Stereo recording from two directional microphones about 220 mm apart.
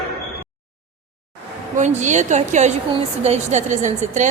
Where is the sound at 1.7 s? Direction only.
35° right (ahead or behind).